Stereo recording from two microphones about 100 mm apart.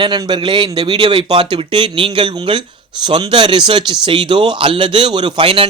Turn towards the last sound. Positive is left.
turn(degrees=-60)  # may be behind; listen again after turning